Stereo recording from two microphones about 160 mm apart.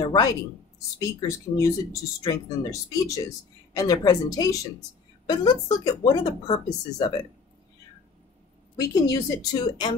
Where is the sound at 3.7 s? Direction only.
25° left (ahead or behind).